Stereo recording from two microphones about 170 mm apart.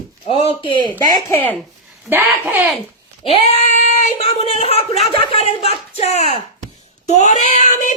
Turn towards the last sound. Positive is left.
turn(degrees=45)  # may be behind; listen again after turning